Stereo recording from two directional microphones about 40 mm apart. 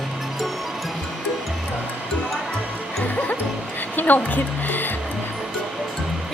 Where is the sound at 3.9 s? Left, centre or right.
Left.